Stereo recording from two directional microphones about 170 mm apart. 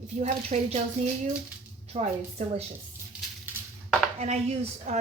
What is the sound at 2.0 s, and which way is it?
Speech, 40° right (ahead or behind).